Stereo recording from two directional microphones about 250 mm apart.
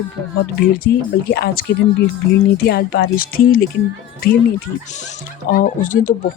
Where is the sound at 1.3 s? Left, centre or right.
Left.